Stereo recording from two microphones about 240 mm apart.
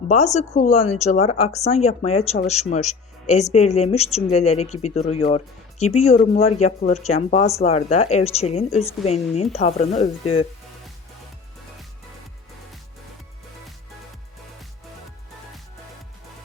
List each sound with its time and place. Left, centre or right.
0.1 s speech: left